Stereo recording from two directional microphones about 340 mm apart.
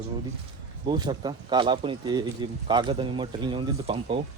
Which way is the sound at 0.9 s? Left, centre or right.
Centre.